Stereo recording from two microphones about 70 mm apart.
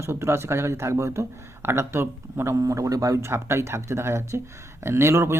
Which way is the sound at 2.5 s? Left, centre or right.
Right.